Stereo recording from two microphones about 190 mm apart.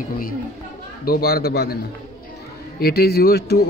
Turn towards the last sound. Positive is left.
turn(degrees=55)  # may be behind; listen again after turning